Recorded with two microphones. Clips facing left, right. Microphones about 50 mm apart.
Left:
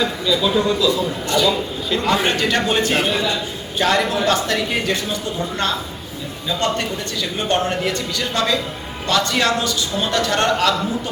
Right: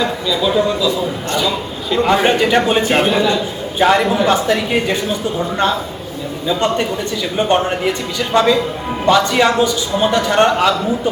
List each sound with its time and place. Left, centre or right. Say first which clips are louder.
0.0 s speech: right 1 dB; centre
0.4 s a man's voice: right 3 dB; centre
2.9 s a man's voice: right 5 dB; right
6.5 s a man's voice: right 4 dB; centre